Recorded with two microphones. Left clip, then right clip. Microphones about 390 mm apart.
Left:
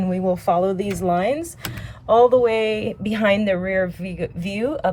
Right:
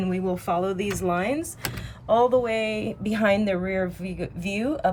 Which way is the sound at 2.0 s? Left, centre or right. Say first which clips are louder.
Left 6 dB; centre.